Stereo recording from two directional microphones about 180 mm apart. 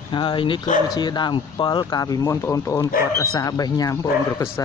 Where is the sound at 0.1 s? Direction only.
25° left (ahead or behind).